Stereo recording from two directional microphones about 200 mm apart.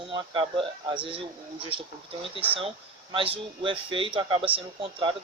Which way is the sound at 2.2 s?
25° right (ahead or behind).